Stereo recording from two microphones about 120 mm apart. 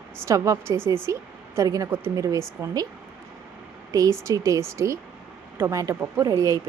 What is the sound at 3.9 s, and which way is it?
Speech, 30° right (ahead or behind).